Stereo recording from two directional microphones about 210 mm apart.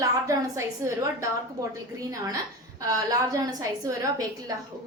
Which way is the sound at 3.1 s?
15° right (ahead or behind).